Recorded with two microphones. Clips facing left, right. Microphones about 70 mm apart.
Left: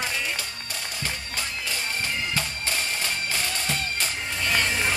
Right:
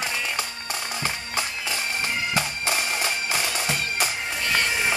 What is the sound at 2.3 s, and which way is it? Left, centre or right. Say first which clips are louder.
Music: right 3 dB; centre.